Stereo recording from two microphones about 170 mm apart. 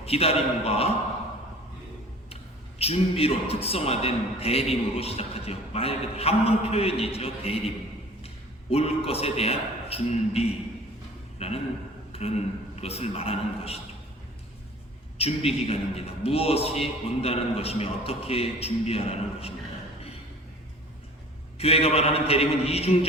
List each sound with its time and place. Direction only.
0.0 s a man's voice: 35° left (ahead or behind)
2.3 s a man's voice: 35° left (ahead or behind)
8.7 s a man's voice: 35° left (ahead or behind)
15.2 s a man's voice: 35° left (ahead or behind)
21.6 s a man's voice: 35° left (ahead or behind)